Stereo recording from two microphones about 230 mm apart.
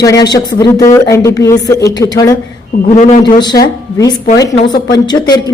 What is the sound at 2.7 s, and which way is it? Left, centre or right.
Speech, left.